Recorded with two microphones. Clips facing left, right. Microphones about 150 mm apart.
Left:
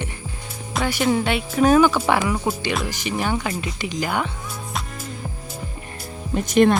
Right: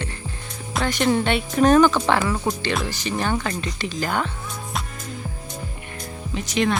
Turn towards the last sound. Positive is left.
turn(degrees=50)  # may be behind; listen again after turning